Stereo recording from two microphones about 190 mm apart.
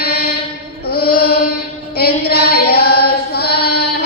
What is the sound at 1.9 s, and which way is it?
Chant, 55° left (ahead or behind).